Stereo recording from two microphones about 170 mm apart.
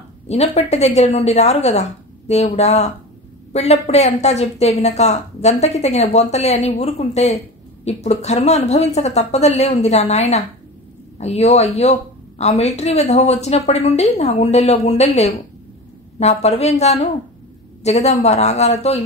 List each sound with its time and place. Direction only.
0.3 s a woman's voice: 40° left (ahead or behind)